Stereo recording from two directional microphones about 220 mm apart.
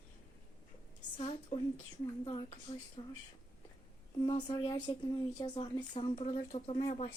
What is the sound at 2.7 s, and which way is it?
Speech, 25° left (ahead or behind).